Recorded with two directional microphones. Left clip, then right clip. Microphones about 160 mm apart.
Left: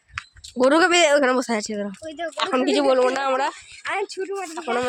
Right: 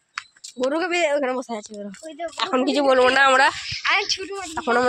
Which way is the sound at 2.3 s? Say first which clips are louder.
Left 1 dB; centre (ahead or behind).